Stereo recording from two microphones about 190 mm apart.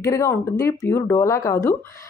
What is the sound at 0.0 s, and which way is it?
Speech, 15° left (ahead or behind).